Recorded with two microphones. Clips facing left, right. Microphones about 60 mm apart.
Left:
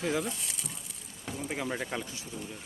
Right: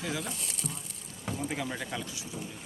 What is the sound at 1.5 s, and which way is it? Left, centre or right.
Speech, centre.